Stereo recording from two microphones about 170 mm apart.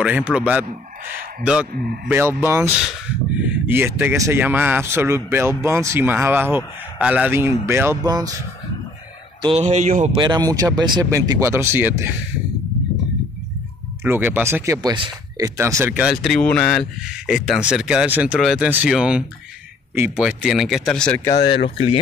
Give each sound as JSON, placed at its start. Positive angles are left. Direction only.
{"t": 0.0, "sound": "speech", "side_deg": -5}
{"t": 1.7, "sound": "a man's voice", "side_deg": -60}
{"t": 2.0, "sound": "speech", "side_deg": -15}
{"t": 9.4, "sound": "speech", "side_deg": -35}
{"t": 10.1, "sound": "speech", "side_deg": -25}
{"t": 14.0, "sound": "speech", "side_deg": -10}
{"t": 21.6, "sound": "speech", "side_deg": 30}